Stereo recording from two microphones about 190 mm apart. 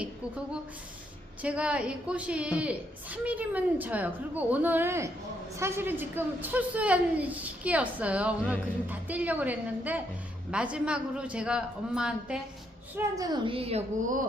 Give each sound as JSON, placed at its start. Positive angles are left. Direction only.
{"t": 1.4, "sound": "a woman's voice", "side_deg": -5}
{"t": 13.0, "sound": "a woman's voice", "side_deg": -20}